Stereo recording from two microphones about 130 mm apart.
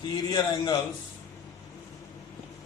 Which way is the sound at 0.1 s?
35° left (ahead or behind).